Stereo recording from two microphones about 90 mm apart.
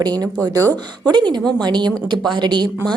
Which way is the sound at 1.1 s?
55° right (ahead or behind).